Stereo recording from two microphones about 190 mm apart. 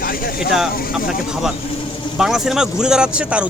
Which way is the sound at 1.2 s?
5° right (ahead or behind).